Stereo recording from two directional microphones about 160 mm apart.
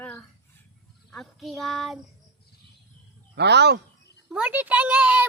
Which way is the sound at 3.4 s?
90° right.